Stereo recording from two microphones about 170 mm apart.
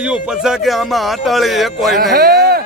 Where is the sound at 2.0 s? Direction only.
65° right (ahead or behind).